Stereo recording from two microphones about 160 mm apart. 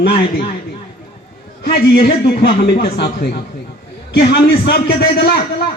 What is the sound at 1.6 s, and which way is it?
A man's voice, 75° left (ahead or behind).